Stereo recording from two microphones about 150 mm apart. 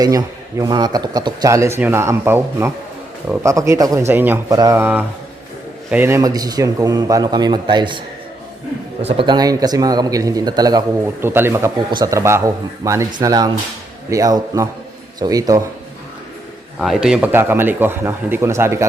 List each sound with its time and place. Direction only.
0.0 s a man's voice: 25° right (ahead or behind)
4.4 s a man's voice: 25° right (ahead or behind)
9.0 s a man's voice: 45° right (ahead or behind)
9.2 s a man's voice: 25° right (ahead or behind)
11.2 s a man's voice: 15° right (ahead or behind)
16.7 s a man's voice: centre (ahead or behind); by 18.9 s 20° right (ahead or behind)